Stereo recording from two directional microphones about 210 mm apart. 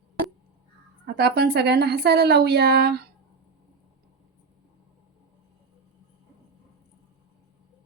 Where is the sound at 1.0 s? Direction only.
50° right (ahead or behind).